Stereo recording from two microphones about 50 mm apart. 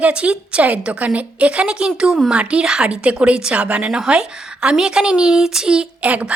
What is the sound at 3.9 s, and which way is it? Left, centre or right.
A woman's voice, centre.